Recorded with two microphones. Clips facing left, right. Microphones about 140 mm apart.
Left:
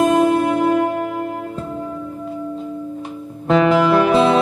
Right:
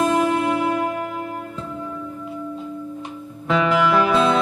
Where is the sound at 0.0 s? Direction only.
40° left (ahead or behind).